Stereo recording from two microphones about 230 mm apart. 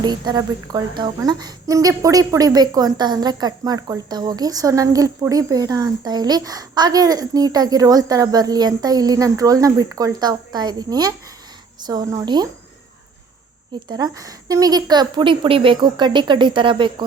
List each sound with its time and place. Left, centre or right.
0.0 s speech: centre
13.7 s a woman's voice: centre